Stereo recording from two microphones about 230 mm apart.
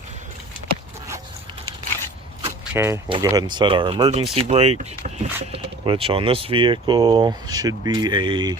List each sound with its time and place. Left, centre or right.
2.7 s speech: centre